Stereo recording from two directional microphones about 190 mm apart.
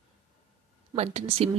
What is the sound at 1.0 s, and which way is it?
Speech, 35° right (ahead or behind).